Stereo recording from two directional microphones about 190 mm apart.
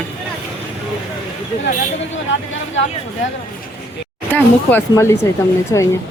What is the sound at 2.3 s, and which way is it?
Speech, 75° left (ahead or behind).